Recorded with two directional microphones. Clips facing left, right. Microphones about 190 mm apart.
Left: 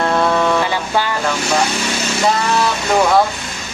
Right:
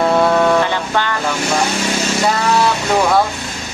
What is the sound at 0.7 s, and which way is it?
Vehicle, 10° left (ahead or behind).